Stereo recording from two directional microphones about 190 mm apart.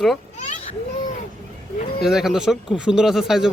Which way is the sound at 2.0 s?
Centre (ahead or behind).